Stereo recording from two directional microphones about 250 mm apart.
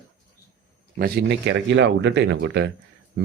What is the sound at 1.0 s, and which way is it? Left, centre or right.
Speech, right.